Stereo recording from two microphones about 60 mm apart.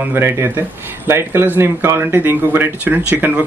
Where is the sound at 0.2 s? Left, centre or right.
Right.